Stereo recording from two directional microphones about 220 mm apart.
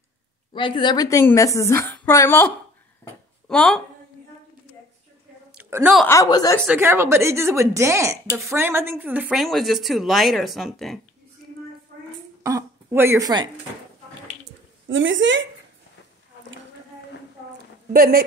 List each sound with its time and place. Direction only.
0.5 s a woman's voice: 20° left (ahead or behind); by 3.8 s 5° left (ahead or behind)
5.6 s a sound: 10° right (ahead or behind)
6.0 s a woman's voice: 15° left (ahead or behind)
6.6 s a woman's voice: 10° right (ahead or behind)
12.4 s a woman's voice: 10° right (ahead or behind)
14.9 s a woman's voice: 60° right (ahead or behind)
17.9 s a woman's voice: 45° right (ahead or behind)